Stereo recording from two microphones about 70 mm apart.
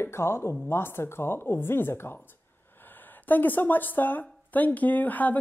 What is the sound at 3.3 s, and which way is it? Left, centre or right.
A woman's voice, left.